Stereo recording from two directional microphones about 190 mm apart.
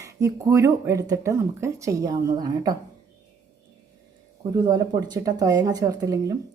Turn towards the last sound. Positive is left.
turn(degrees=-20)  # may be behind; listen again after turning